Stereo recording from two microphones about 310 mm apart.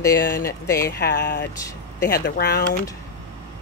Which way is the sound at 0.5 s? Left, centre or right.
Centre.